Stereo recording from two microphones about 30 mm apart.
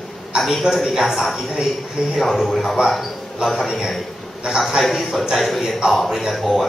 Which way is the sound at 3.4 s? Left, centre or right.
Right.